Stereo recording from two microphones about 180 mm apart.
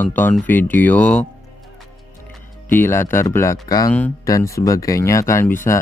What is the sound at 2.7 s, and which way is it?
Speech, 15° left (ahead or behind).